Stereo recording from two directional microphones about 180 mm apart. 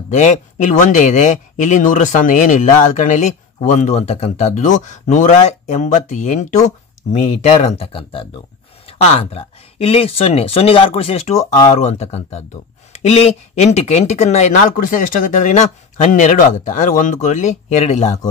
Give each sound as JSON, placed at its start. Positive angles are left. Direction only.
{"t": 0.1, "sound": "speech", "side_deg": 40}